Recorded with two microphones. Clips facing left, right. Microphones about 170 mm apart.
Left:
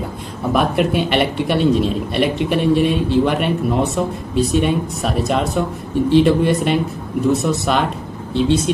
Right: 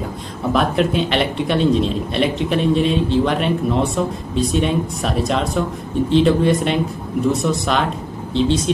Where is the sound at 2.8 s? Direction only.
60° left (ahead or behind).